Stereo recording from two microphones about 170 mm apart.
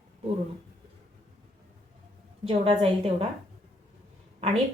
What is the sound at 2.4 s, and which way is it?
Speech, 35° right (ahead or behind).